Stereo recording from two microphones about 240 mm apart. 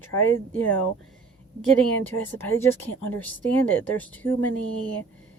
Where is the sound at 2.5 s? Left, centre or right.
Centre.